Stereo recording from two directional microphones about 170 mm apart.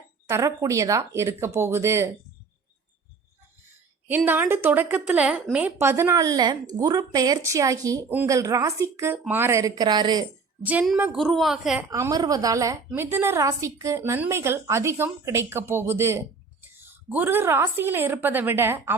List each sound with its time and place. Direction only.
0.3 s speech: 15° right (ahead or behind)
4.3 s speech: 15° right (ahead or behind)
10.6 s a woman's voice: 10° right (ahead or behind)
11.9 s speech: 20° right (ahead or behind)